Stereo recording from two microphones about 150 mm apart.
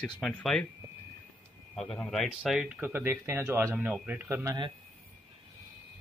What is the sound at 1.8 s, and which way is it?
Speech, 5° left (ahead or behind).